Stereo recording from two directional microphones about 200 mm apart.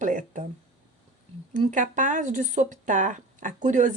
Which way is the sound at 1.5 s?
40° right (ahead or behind).